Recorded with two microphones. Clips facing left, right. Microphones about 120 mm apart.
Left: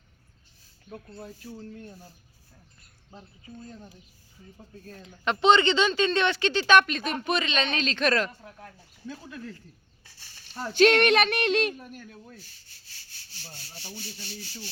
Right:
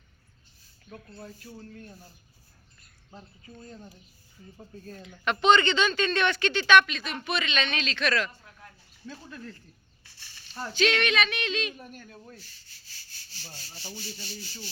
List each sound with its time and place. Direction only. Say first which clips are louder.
3.2 s speech: left 2 dB; 10° left (ahead or behind)
4.8 s speech: right 2 dB; centre (ahead or behind)
5.2 s speech: left 1 dB; 25° left (ahead or behind); by 8.7 s 45° left (ahead or behind)
9.0 s speech: left 3 dB; 10° left (ahead or behind)
10.7 s speech: left 7 dB; 55° left (ahead or behind)
11.7 s speech: left 3 dB; centre (ahead or behind)
14.0 s speech: even; 60° left (ahead or behind)